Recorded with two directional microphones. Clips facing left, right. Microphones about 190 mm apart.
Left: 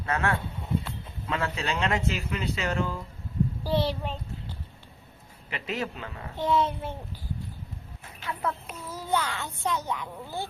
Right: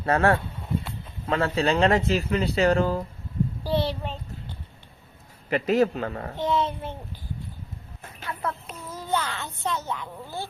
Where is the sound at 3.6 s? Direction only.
10° left (ahead or behind).